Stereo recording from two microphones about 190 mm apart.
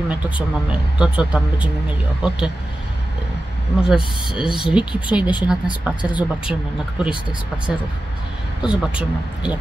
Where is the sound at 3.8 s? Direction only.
5° right (ahead or behind).